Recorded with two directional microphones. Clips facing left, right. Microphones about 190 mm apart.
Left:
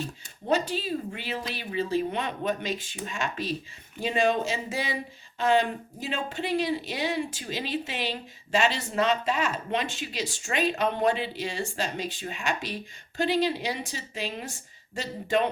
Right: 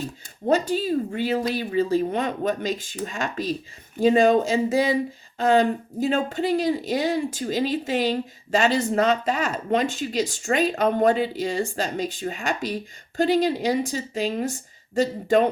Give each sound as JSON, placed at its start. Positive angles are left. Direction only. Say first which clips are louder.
{"t": 0.4, "sound": "speech", "louder": "right 5 dB", "side_deg": -45}